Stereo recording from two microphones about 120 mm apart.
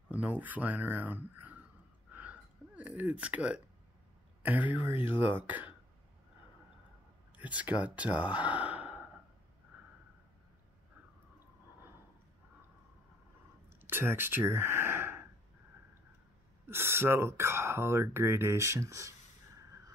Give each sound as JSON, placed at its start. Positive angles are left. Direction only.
{"t": 0.1, "sound": "speech", "side_deg": -15}
{"t": 2.1, "sound": "a sound", "side_deg": -10}
{"t": 4.4, "sound": "speech", "side_deg": -15}
{"t": 7.3, "sound": "speech", "side_deg": -10}
{"t": 13.7, "sound": "speech", "side_deg": -15}
{"t": 16.6, "sound": "speech", "side_deg": -20}